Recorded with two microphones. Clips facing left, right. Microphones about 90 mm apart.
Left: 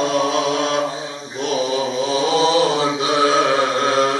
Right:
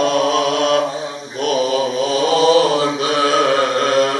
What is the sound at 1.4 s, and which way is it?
Mantra, 20° left (ahead or behind).